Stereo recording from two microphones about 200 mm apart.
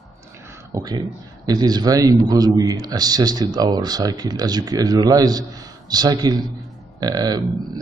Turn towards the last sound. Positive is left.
turn(degrees=-20)  # may be behind; listen again after turning